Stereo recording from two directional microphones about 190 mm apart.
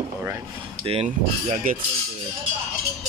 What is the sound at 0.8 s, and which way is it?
Speech, 30° right (ahead or behind).